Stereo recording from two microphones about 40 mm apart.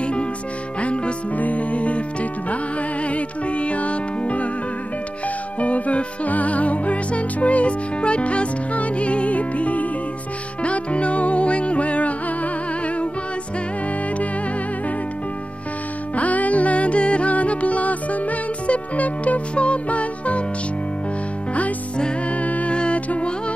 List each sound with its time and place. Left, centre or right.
0.0 s music: left
5.6 s music: left
16.2 s music: left
22.3 s music: left